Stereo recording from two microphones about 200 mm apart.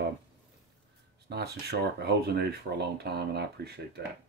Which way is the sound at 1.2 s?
55° right (ahead or behind).